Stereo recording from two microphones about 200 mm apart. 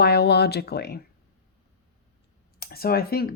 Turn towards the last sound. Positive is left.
turn(degrees=50)  # may be behind; listen again after turning